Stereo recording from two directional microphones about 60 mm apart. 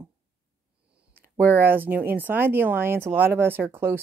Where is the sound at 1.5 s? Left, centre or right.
Right.